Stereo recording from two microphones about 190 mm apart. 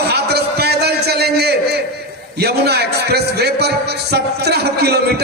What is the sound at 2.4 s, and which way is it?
A man's voice, 60° right (ahead or behind).